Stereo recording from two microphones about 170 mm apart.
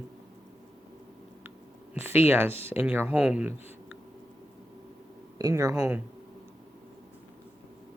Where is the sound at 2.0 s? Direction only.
10° right (ahead or behind).